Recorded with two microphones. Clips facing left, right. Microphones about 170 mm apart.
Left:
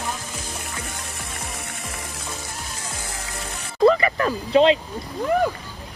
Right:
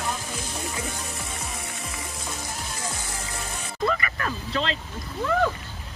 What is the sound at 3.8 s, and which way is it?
Music, 30° left (ahead or behind).